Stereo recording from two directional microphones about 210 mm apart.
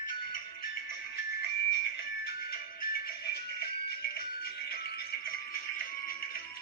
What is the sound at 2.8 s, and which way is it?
Music, 45° left (ahead or behind).